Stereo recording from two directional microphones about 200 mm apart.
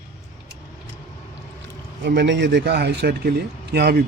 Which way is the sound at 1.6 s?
60° right (ahead or behind).